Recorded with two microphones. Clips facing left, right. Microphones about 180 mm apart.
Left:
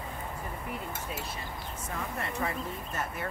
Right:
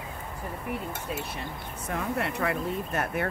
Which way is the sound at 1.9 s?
70° right (ahead or behind).